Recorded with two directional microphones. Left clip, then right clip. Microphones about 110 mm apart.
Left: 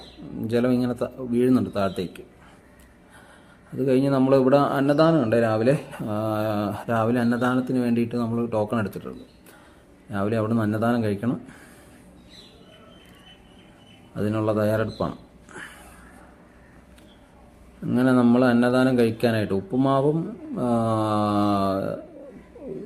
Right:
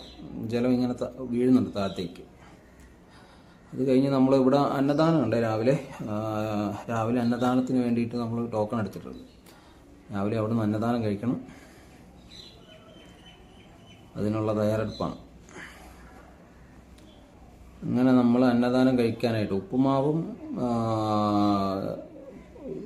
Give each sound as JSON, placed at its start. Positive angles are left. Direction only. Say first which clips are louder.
{"t": 0.4, "sound": "a man's voice", "louder": "left 4 dB", "side_deg": 25}
{"t": 3.8, "sound": "a man's voice", "louder": "left 2 dB", "side_deg": 20}
{"t": 14.2, "sound": "a man's voice", "louder": "left 4 dB", "side_deg": 20}
{"t": 17.9, "sound": "a man's voice", "louder": "left 3 dB", "side_deg": 20}